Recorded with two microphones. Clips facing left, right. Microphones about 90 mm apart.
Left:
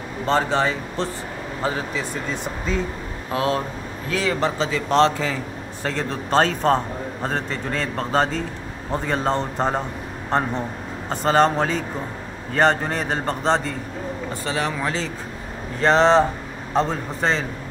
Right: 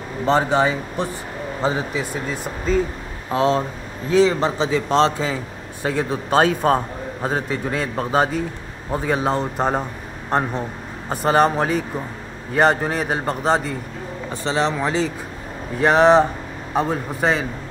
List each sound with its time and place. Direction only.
0.2 s a man's voice: 15° right (ahead or behind)
2.3 s speech: centre (ahead or behind)
3.3 s a man's voice: 25° right (ahead or behind); by 9.8 s 10° right (ahead or behind)
11.1 s a man's voice: 10° right (ahead or behind)
14.3 s a man's voice: 25° right (ahead or behind)